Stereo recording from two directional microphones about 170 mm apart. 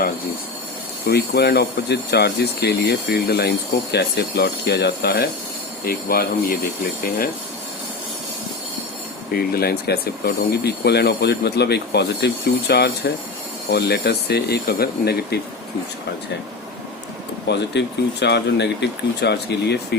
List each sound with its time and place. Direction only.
1.0 s speech: 70° left (ahead or behind)
9.3 s speech: 60° left (ahead or behind)
17.5 s speech: 90° left